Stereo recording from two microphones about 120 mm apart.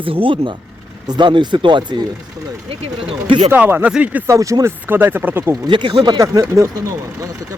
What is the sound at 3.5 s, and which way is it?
Speech, 15° right (ahead or behind).